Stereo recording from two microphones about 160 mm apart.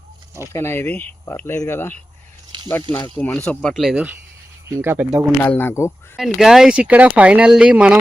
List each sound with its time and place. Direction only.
0.5 s speech: 15° left (ahead or behind)
2.5 s snake: 30° right (ahead or behind)
3.2 s speech: 10° left (ahead or behind); by 5.2 s 10° right (ahead or behind)
5.4 s speech: 10° left (ahead or behind)
6.1 s speech: centre (ahead or behind)